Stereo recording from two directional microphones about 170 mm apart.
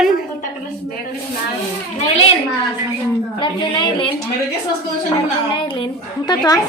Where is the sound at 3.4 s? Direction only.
30° left (ahead or behind).